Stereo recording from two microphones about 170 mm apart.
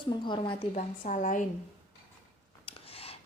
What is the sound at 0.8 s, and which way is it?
Speech, 50° left (ahead or behind).